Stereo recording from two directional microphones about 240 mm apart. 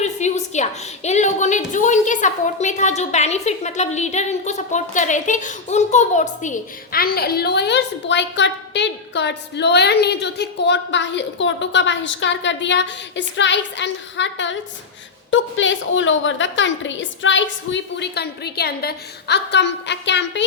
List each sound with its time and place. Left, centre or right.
0.0 s a woman's voice: left